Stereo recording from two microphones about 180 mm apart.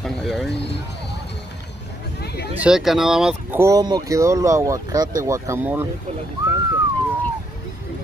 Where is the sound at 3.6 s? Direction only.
20° right (ahead or behind).